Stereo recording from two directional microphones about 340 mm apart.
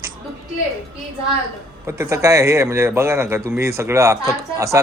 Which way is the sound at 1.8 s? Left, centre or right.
Centre.